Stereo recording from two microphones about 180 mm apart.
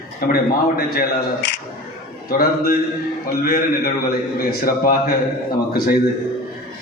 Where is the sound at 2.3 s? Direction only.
55° left (ahead or behind).